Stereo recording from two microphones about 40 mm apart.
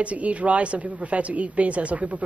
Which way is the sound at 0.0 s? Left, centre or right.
Right.